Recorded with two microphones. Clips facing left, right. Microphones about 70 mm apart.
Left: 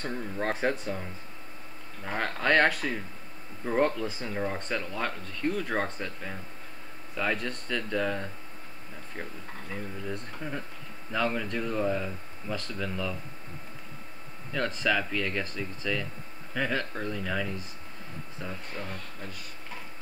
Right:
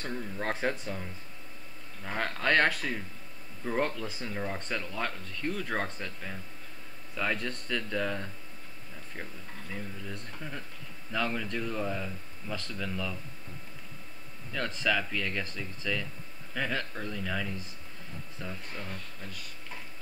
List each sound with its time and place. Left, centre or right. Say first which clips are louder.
0.0 s speech: left 3 dB; centre
2.0 s speech: left 2 dB; centre
10.0 s speech: left 5 dB; centre
14.5 s speech: left 2 dB; centre
18.4 s speech: left 3 dB; centre